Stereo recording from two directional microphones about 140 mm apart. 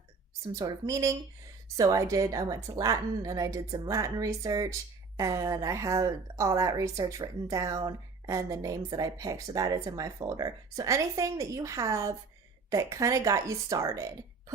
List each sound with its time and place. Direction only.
0.6 s a woman's voice: 25° right (ahead or behind)